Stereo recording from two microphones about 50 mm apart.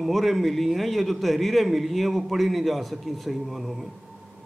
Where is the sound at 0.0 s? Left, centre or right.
Centre.